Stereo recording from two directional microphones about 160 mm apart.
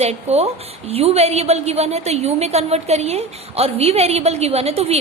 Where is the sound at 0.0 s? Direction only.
40° right (ahead or behind).